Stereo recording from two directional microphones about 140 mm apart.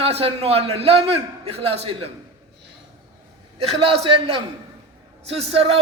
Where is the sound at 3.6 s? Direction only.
45° right (ahead or behind).